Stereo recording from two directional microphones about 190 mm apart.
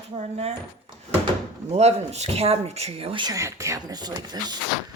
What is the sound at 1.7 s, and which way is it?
Speech, 35° right (ahead or behind).